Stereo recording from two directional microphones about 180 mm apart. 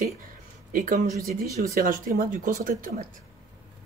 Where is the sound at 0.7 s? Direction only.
45° right (ahead or behind).